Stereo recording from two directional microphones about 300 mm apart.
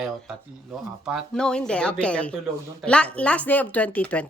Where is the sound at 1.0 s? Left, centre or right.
Centre.